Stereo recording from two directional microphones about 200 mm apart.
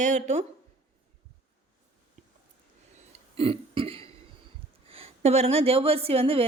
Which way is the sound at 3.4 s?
25° right (ahead or behind).